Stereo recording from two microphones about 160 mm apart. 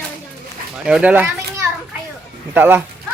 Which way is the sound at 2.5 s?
10° right (ahead or behind).